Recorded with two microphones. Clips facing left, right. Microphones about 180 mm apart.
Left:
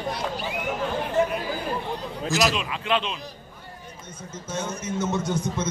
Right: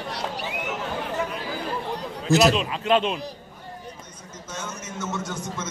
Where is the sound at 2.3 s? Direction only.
35° right (ahead or behind).